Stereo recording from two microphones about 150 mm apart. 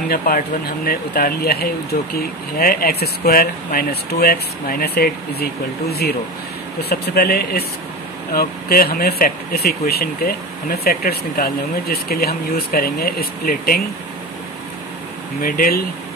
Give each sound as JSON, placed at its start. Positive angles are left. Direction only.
{"t": 0.1, "sound": "speech", "side_deg": 70}
{"t": 0.8, "sound": "speech", "side_deg": 90}
{"t": 15.4, "sound": "speech", "side_deg": 75}